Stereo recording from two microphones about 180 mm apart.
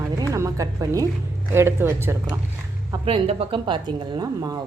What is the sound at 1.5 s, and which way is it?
Speech, 15° right (ahead or behind).